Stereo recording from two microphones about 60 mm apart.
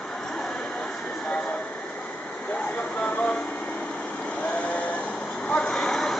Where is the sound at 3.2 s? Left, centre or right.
Centre.